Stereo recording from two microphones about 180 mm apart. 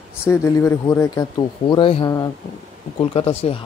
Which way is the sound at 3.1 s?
30° left (ahead or behind).